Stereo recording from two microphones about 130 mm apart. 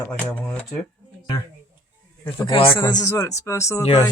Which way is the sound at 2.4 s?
40° left (ahead or behind).